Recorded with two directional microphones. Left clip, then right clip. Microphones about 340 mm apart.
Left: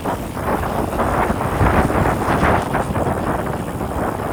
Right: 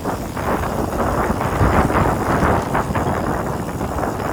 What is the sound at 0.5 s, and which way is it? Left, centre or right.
Vehicle, centre.